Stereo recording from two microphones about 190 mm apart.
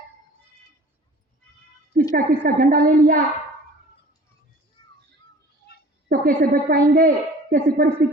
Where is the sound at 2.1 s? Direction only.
50° right (ahead or behind).